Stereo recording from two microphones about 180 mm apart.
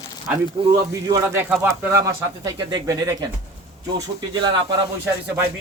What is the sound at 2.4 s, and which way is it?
Speech, 20° right (ahead or behind).